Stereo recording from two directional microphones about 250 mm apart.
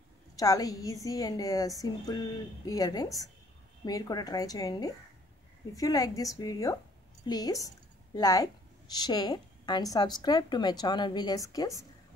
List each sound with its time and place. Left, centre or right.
0.4 s a woman's voice: centre